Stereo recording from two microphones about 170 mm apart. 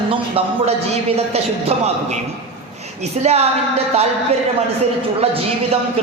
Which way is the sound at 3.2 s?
40° right (ahead or behind).